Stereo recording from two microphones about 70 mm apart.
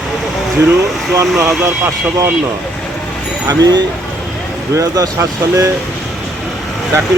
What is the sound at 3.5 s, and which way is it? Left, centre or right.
Speech, right.